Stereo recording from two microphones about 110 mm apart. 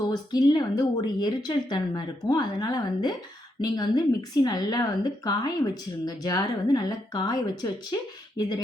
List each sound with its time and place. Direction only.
0.1 s a woman's voice: 35° left (ahead or behind)